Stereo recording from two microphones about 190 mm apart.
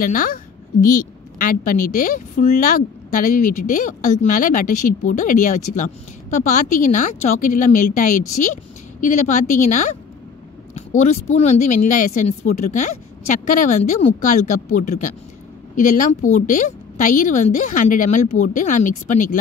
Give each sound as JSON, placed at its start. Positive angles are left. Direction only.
{"t": 0.0, "sound": "a woman's voice", "side_deg": 45}